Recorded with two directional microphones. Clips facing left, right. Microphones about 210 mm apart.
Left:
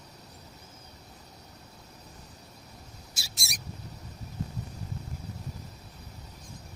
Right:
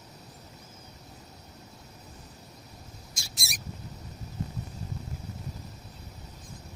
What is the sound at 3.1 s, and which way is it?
Bird, 5° left (ahead or behind).